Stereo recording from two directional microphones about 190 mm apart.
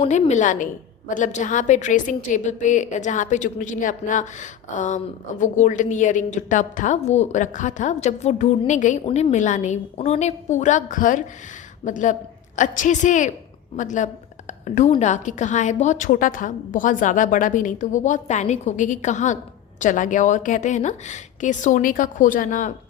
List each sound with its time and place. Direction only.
0.0 s a woman's voice: 35° left (ahead or behind)